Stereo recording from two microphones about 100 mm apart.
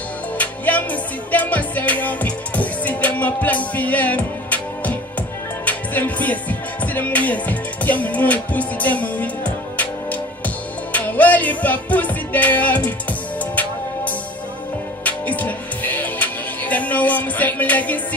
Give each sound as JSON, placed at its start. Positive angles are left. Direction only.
{"t": 0.4, "sound": "music", "side_deg": 15}
{"t": 15.0, "sound": "music", "side_deg": 15}